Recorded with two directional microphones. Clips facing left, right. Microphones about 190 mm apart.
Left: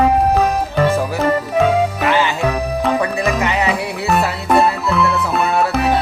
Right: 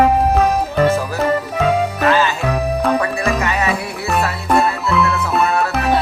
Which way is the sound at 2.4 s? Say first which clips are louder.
Even; centre (ahead or behind).